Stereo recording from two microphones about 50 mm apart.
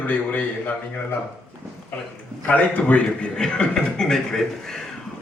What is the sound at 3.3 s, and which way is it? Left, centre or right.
A man's voice, centre.